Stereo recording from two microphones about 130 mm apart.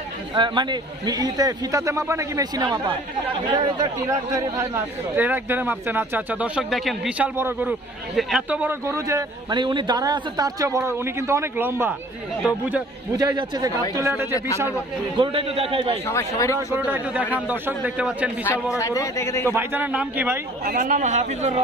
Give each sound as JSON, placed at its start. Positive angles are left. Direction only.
{"t": 0.3, "sound": "a man's voice", "side_deg": -35}
{"t": 8.2, "sound": "speech", "side_deg": -5}
{"t": 9.6, "sound": "a man's voice", "side_deg": -35}
{"t": 13.1, "sound": "a man's voice", "side_deg": -30}
{"t": 13.9, "sound": "a man's voice", "side_deg": -20}
{"t": 15.1, "sound": "a man's voice", "side_deg": -40}
{"t": 16.1, "sound": "speech", "side_deg": 20}
{"t": 16.5, "sound": "speech", "side_deg": -15}
{"t": 18.8, "sound": "speech", "side_deg": 25}
{"t": 19.5, "sound": "speech", "side_deg": -15}
{"t": 20.8, "sound": "a man's voice", "side_deg": -70}